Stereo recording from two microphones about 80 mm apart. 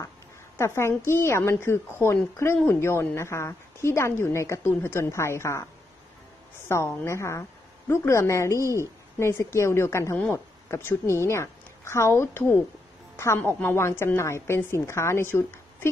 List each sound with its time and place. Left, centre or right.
0.6 s a woman's voice: left
2.5 s speech: left
2.8 s a woman's voice: left
6.7 s a woman's voice: left